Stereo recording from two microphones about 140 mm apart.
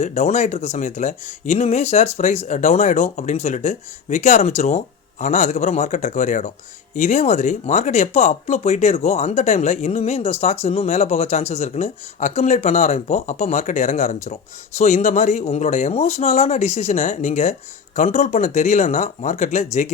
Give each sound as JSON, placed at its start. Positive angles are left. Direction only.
{"t": 0.0, "sound": "speech", "side_deg": 55}